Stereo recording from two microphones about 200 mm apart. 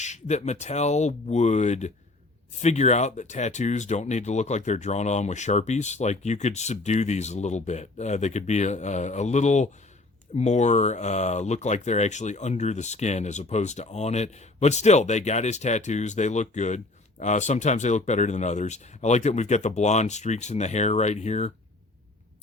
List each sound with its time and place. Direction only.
0.0 s speech: 35° left (ahead or behind)